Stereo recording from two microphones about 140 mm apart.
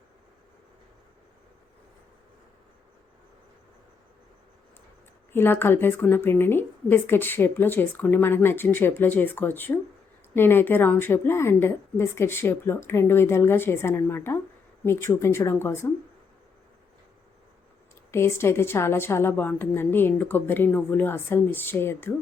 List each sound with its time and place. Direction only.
5.3 s a woman's voice: 15° left (ahead or behind)
18.1 s a woman's voice: 20° left (ahead or behind)